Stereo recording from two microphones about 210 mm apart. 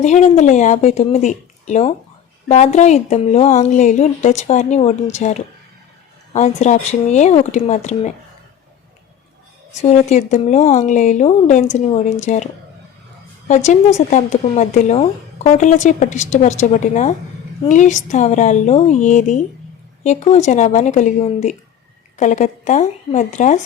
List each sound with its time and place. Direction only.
0.0 s a woman's voice: 35° left (ahead or behind)
9.9 s a woman's voice: 35° left (ahead or behind)
13.5 s a woman's voice: 35° left (ahead or behind)